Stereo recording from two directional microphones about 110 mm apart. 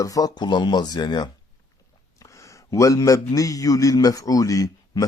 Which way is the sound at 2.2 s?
30° left (ahead or behind).